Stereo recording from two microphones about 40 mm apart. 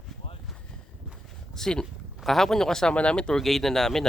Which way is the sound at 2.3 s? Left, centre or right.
Centre.